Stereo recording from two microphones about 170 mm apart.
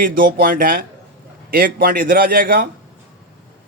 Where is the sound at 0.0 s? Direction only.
55° right (ahead or behind).